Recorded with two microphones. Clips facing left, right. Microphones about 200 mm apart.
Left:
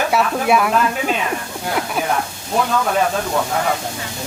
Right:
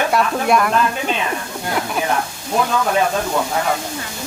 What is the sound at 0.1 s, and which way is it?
Speech, 5° left (ahead or behind).